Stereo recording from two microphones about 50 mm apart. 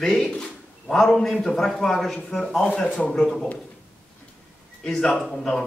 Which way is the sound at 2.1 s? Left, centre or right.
Centre.